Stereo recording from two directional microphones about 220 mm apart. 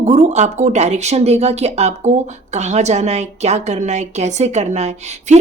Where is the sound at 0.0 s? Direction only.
30° right (ahead or behind).